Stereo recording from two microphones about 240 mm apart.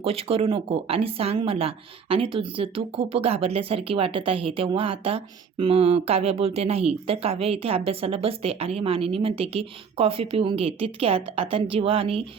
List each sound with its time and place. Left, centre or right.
0.0 s speech: right